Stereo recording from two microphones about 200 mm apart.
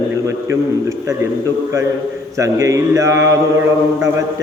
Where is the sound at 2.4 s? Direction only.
15° right (ahead or behind).